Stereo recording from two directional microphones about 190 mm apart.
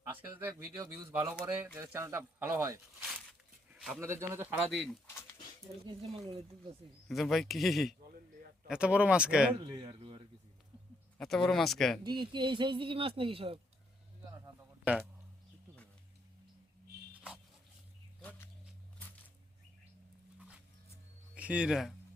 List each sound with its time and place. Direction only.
0.1 s speech: 10° right (ahead or behind)
1.3 s speech: 5° right (ahead or behind)
3.7 s a sound: centre (ahead or behind)
4.0 s speech: 15° right (ahead or behind)
4.7 s speech: centre (ahead or behind)
5.9 s speech: 30° right (ahead or behind)
7.1 s speech: centre (ahead or behind)
9.6 s speech: 25° right (ahead or behind)
11.2 s speech: centre (ahead or behind)
12.0 s speech: 25° right (ahead or behind)
14.3 s a sound: 15° right (ahead or behind)
18.2 s a sound: 10° left (ahead or behind)
21.3 s speech: 5° right (ahead or behind)